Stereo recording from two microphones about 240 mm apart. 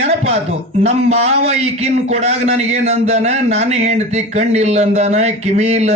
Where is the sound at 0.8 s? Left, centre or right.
Right.